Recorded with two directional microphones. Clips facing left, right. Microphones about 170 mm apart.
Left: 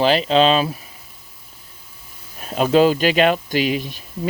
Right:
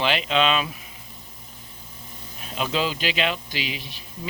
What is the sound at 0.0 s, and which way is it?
Speech, 35° left (ahead or behind).